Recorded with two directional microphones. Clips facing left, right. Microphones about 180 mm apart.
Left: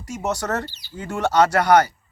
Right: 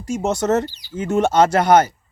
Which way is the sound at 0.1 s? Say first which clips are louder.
Right 6 dB; 25° right (ahead or behind).